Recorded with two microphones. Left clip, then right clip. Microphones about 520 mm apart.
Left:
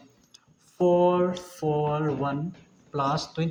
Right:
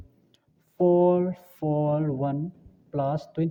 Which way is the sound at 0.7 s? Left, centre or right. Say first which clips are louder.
Even; right.